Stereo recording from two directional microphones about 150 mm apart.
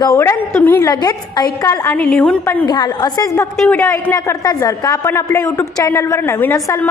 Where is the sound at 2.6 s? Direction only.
25° left (ahead or behind).